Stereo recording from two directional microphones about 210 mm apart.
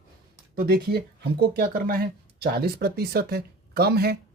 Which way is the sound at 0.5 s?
45° right (ahead or behind).